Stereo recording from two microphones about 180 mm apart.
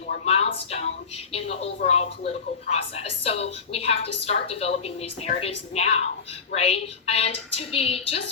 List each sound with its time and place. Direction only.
0.1 s a woman's voice: 35° left (ahead or behind)